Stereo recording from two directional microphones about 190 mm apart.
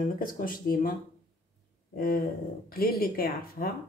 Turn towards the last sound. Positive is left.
turn(degrees=50)  # may be behind; listen again after turning